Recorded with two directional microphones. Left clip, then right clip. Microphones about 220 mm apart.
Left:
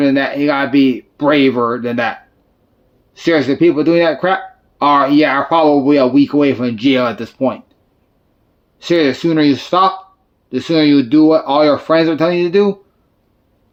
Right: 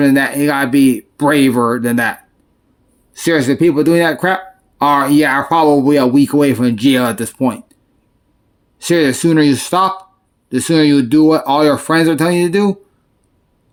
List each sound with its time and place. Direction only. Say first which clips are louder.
0.0 s speech: right 1 dB; 50° right (ahead or behind)
3.2 s speech: even; 55° right (ahead or behind)
8.8 s speech: even; 50° right (ahead or behind)